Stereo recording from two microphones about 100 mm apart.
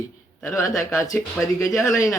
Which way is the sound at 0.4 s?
35° left (ahead or behind).